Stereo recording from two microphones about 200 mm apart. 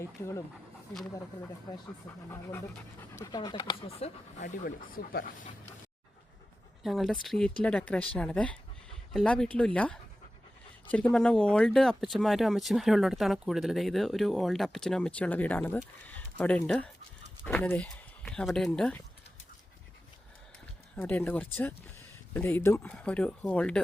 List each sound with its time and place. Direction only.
0.0 s speech: 15° left (ahead or behind)
1.7 s speech: 15° left (ahead or behind); by 4.7 s 40° left (ahead or behind)
6.8 s speech: centre (ahead or behind)
20.9 s speech: 10° left (ahead or behind)